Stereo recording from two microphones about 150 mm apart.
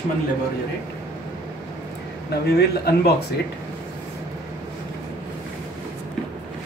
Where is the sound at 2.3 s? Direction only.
90° left.